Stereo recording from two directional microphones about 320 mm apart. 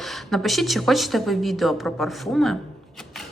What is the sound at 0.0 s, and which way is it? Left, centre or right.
A woman's voice, centre.